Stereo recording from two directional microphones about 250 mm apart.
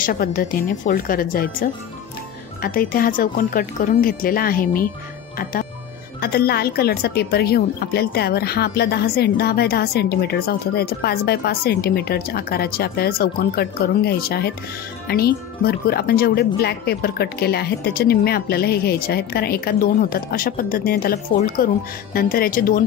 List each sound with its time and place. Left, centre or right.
0.0 s speech: left